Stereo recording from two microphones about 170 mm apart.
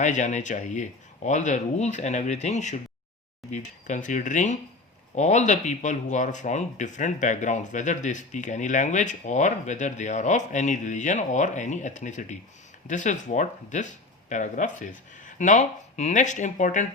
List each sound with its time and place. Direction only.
0.0 s speech: 45° left (ahead or behind)